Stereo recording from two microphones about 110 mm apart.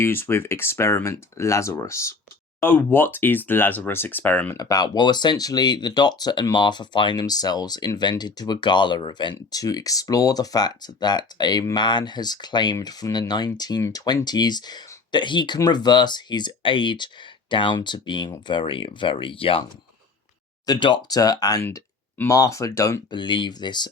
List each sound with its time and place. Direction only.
0.0 s speech: 20° left (ahead or behind)
4.5 s speech: 35° left (ahead or behind); by 19.6 s 55° left (ahead or behind)
20.7 s speech: 45° left (ahead or behind); by 23.1 s 30° left (ahead or behind)
23.1 s speech: 45° left (ahead or behind)